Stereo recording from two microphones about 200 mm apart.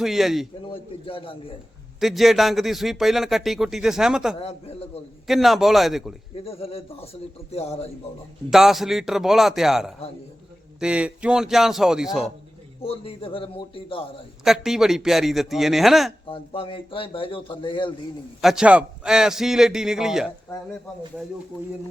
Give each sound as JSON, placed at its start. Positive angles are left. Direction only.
{"t": 0.0, "sound": "a man's voice", "side_deg": 0}
{"t": 0.7, "sound": "speech", "side_deg": 25}
{"t": 2.0, "sound": "a man's voice", "side_deg": 0}
{"t": 4.4, "sound": "a man's voice", "side_deg": 30}
{"t": 5.2, "sound": "a man's voice", "side_deg": 0}
{"t": 6.4, "sound": "speech", "side_deg": 30}
{"t": 8.4, "sound": "a man's voice", "side_deg": 0}
{"t": 12.8, "sound": "speech", "side_deg": 30}
{"t": 14.4, "sound": "a man's voice", "side_deg": 0}
{"t": 16.3, "sound": "speech", "side_deg": 25}
{"t": 18.4, "sound": "a man's voice", "side_deg": -5}